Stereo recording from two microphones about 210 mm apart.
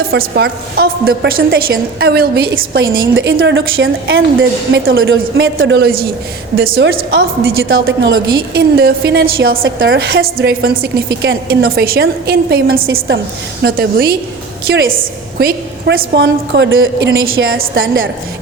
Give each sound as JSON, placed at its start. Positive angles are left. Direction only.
{"t": 0.1, "sound": "a woman's voice", "side_deg": -50}
{"t": 3.3, "sound": "a woman's voice", "side_deg": -60}
{"t": 6.9, "sound": "a woman's voice", "side_deg": -60}
{"t": 8.1, "sound": "a woman's voice", "side_deg": -50}